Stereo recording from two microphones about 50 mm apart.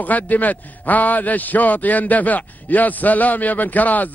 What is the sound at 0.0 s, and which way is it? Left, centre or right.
A man's voice, left.